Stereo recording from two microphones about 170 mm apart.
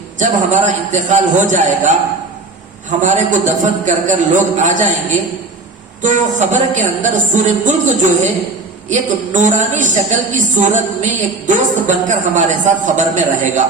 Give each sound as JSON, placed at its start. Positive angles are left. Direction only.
{"t": 0.2, "sound": "a woman's voice", "side_deg": -45}
{"t": 3.0, "sound": "a woman's voice", "side_deg": -45}
{"t": 6.0, "sound": "a woman's voice", "side_deg": -45}